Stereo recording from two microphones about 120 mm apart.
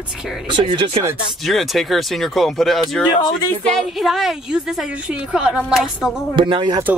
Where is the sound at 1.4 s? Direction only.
Centre (ahead or behind).